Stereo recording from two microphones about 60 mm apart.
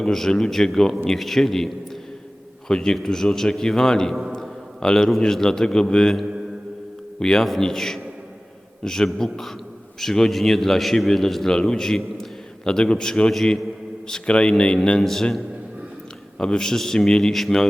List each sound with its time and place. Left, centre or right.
0.0 s a man's voice: centre
7.2 s a man's voice: centre
15.0 s a man's voice: centre